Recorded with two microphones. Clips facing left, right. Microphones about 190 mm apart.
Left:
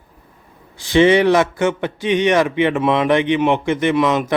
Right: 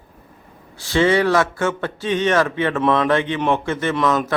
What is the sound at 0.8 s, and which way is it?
A man's voice, 20° left (ahead or behind).